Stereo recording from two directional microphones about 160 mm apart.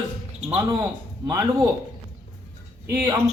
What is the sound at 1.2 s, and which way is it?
Speech, 20° right (ahead or behind).